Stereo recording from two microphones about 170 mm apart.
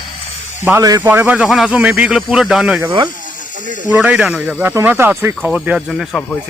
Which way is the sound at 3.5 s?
50° right (ahead or behind).